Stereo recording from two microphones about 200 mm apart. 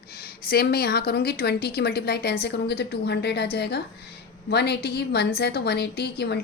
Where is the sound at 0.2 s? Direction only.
50° left (ahead or behind).